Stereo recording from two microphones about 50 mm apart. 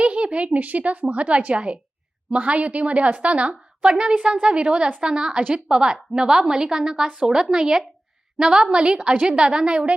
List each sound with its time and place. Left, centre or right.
0.0 s a woman's voice: right